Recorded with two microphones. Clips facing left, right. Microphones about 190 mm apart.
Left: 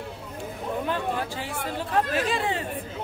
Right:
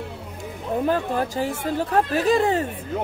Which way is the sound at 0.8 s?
40° right (ahead or behind).